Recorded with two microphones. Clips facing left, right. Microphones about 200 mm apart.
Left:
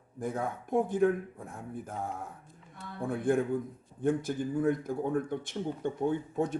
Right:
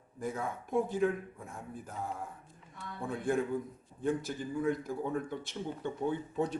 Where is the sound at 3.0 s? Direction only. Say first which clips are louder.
Left 4 dB; 55° left (ahead or behind).